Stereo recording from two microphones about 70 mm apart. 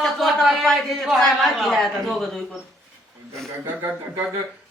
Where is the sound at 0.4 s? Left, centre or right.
Centre.